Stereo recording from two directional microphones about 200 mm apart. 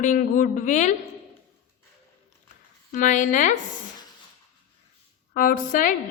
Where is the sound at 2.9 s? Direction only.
40° left (ahead or behind).